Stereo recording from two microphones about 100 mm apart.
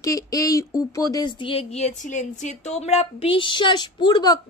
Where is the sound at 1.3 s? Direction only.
70° left (ahead or behind).